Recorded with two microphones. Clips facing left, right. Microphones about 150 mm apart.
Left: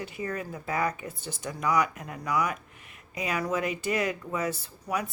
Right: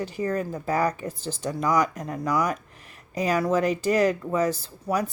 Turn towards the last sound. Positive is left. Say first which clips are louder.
# right 5 dB
turn(degrees=-30)  # may be behind; listen again after turning